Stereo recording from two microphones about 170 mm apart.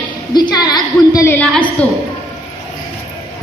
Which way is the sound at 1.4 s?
5° left (ahead or behind).